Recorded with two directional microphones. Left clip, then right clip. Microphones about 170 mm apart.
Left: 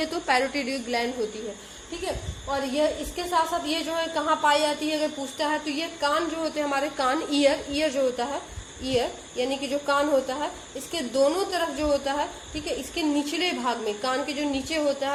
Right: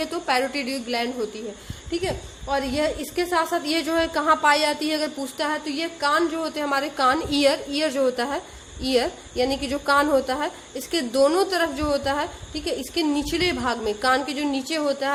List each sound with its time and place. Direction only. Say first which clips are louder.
0.0 s a woman's voice: right 1 dB; 15° right (ahead or behind)
2.5 s a woman's voice: right 1 dB; 45° right (ahead or behind)